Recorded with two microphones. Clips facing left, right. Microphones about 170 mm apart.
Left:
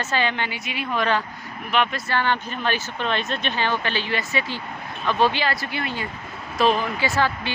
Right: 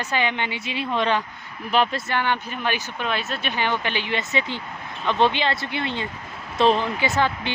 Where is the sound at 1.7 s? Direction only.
35° right (ahead or behind).